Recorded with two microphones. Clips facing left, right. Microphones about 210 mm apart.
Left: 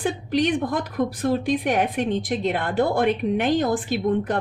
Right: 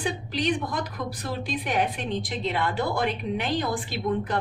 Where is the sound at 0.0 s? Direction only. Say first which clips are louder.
Left 6 dB; 55° left (ahead or behind).